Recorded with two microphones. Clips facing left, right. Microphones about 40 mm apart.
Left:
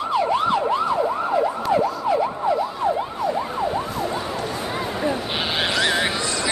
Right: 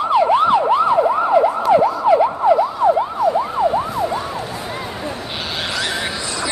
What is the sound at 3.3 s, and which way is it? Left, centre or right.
Emergency vehicle, centre.